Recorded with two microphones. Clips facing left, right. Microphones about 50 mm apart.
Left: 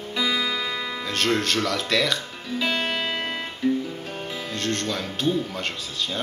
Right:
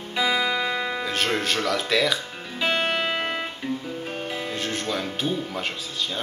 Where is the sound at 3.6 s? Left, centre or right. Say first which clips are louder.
Left 9 dB; right.